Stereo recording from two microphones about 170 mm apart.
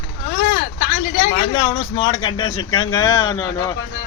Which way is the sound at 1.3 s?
30° left (ahead or behind).